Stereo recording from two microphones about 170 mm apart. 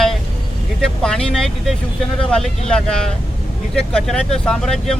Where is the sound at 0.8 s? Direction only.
5° left (ahead or behind).